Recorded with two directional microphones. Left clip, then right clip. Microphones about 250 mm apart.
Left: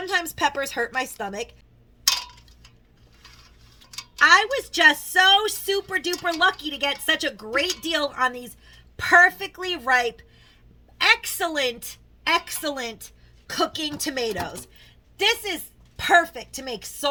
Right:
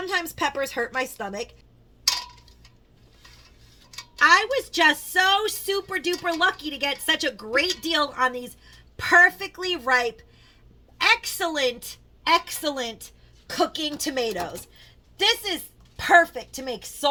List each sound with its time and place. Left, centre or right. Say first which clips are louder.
0.0 s speech: left 2 dB; centre
4.2 s a woman's voice: left 1 dB; centre
15.2 s a woman's voice: even; centre